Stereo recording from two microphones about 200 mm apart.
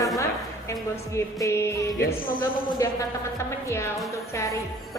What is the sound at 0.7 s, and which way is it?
A woman's voice, 15° left (ahead or behind).